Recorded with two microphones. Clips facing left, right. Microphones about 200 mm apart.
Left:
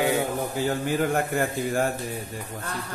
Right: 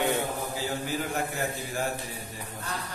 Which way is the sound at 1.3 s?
55° left (ahead or behind).